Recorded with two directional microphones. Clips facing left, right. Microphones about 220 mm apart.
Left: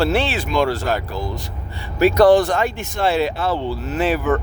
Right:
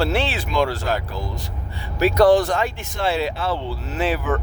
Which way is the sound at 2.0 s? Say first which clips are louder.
Left 3 dB; 70° left (ahead or behind).